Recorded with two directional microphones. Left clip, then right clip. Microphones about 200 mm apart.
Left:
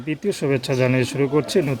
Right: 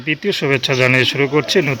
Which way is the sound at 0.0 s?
Centre (ahead or behind).